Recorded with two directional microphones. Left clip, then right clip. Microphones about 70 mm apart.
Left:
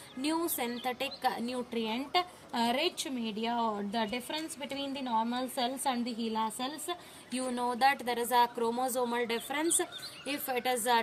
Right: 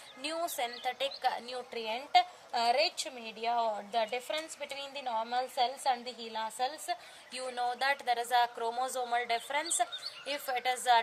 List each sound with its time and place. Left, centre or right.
0.2 s a woman's voice: right